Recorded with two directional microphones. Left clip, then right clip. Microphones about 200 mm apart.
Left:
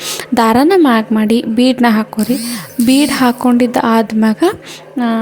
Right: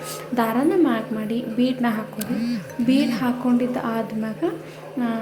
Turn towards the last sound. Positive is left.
turn(degrees=45)  # may be behind; listen again after turning